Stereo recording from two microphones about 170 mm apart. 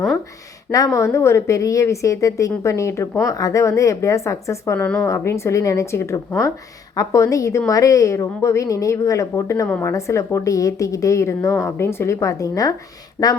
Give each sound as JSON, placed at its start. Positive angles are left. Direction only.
{"t": 0.9, "sound": "a woman's voice", "side_deg": 15}